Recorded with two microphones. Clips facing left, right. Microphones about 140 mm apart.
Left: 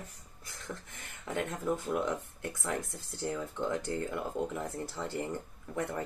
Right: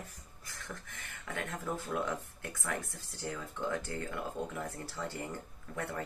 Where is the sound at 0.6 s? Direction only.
20° left (ahead or behind).